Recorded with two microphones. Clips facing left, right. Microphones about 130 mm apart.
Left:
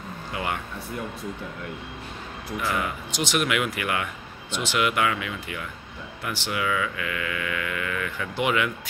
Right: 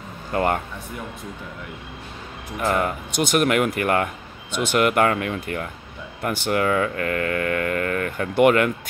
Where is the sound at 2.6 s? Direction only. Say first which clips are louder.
Right 7 dB; 50° right (ahead or behind).